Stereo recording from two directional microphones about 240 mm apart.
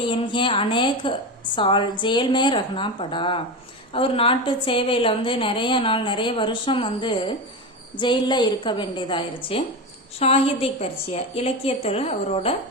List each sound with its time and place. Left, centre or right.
0.1 s a woman's voice: left